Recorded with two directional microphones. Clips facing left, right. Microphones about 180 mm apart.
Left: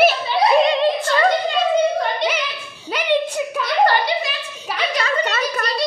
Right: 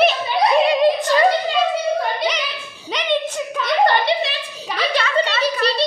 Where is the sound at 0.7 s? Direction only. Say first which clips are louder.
Right 2 dB; 15° right (ahead or behind).